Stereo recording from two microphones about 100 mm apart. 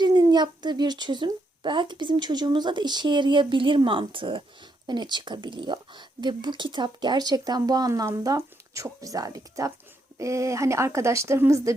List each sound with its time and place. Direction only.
0.0 s speech: 40° right (ahead or behind)